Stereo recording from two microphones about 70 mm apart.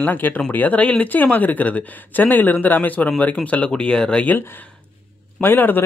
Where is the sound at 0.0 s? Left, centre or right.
Left.